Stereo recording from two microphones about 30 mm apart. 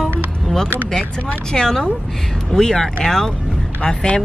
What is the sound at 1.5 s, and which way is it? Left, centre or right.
Speech, left.